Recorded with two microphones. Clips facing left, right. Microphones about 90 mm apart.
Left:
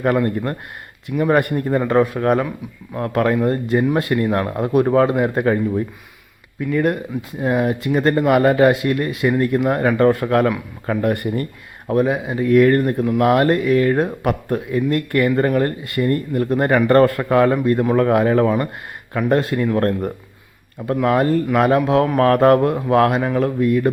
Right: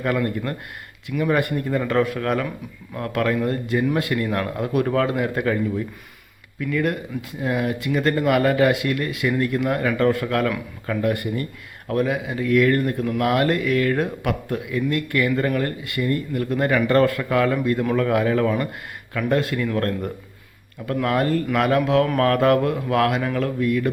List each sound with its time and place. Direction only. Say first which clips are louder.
0.0 s speech: left 5 dB; 40° left (ahead or behind)
11.9 s speech: left 4 dB; 30° left (ahead or behind)